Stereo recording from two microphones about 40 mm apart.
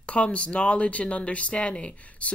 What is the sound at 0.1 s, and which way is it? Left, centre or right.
Speech, left.